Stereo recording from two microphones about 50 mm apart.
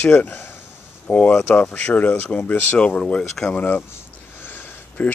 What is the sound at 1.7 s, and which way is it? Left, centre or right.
Speech, left.